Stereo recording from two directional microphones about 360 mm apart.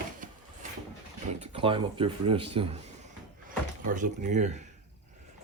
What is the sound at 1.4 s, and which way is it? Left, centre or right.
Speech, centre.